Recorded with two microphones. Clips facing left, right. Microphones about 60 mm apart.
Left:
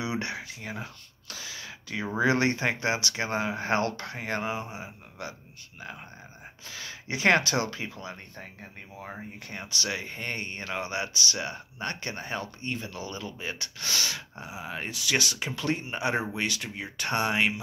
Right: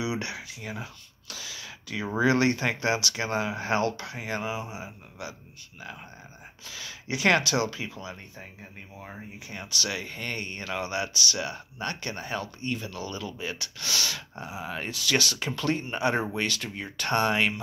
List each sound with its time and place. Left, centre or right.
0.0 s speech: left
1.3 s a sound: left
2.1 s speech: left
6.6 s speech: left; by 17.6 s centre